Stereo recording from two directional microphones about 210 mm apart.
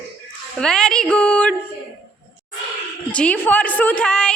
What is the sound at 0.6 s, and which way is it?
Speech, 5° left (ahead or behind).